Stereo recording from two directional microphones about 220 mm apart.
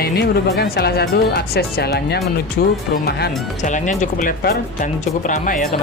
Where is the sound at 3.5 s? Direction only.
35° left (ahead or behind).